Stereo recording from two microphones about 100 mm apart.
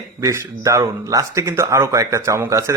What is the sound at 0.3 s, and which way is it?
Speech, 30° right (ahead or behind).